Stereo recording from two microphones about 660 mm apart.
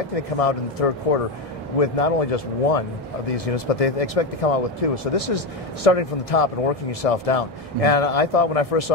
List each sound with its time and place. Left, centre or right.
0.1 s speech: left